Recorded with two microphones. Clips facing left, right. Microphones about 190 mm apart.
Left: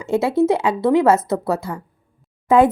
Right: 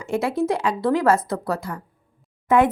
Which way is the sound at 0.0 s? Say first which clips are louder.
Left 5 dB; 25° left (ahead or behind).